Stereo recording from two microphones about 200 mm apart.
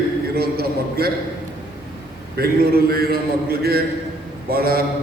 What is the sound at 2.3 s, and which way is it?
A man's voice, 50° right (ahead or behind).